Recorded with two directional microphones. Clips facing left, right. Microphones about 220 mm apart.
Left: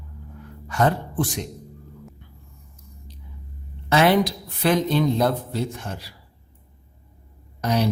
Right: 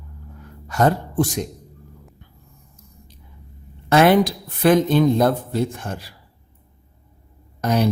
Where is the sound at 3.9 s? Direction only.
50° right (ahead or behind).